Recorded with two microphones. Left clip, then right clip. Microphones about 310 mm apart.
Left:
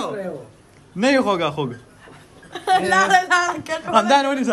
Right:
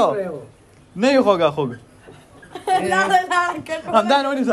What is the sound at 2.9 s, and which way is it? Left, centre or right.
Speech, left.